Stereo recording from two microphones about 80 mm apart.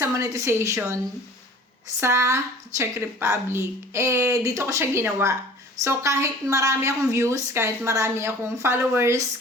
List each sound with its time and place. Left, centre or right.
0.0 s speech: right
2.0 s speech: right